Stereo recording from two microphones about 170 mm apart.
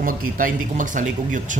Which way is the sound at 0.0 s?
50° right (ahead or behind).